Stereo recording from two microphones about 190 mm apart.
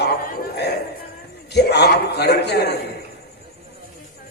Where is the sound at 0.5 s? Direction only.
60° left (ahead or behind).